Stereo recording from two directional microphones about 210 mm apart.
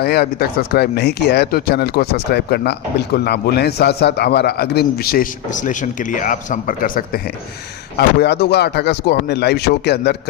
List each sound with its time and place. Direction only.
0.0 s a man's voice: 50° left (ahead or behind)